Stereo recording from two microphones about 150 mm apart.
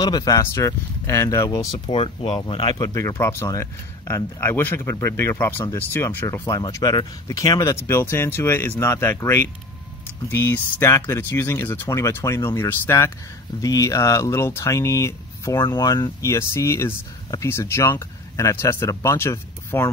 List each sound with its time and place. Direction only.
0.0 s speech: 25° left (ahead or behind)
1.9 s speech: 40° left (ahead or behind); by 19.9 s 15° left (ahead or behind)